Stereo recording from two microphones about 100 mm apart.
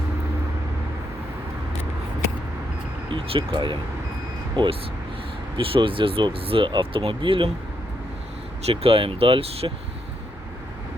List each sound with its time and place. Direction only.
3.1 s speech: 50° right (ahead or behind)
8.6 s speech: 70° right (ahead or behind)